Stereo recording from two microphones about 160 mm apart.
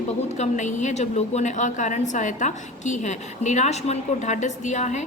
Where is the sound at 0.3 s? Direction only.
50° left (ahead or behind).